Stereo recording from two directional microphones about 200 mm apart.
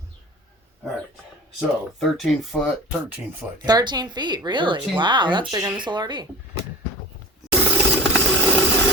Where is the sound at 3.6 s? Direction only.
20° right (ahead or behind).